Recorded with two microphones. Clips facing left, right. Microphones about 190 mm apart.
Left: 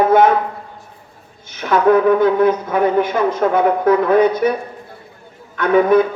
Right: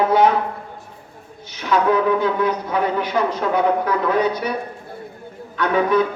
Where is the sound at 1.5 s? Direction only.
50° left (ahead or behind).